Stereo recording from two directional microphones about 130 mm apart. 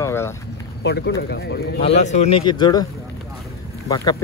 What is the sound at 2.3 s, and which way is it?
Speech, 35° left (ahead or behind).